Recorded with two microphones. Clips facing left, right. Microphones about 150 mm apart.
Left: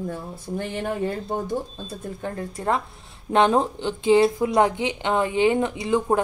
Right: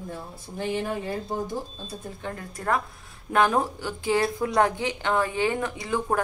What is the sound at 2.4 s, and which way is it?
A woman's voice, 25° left (ahead or behind).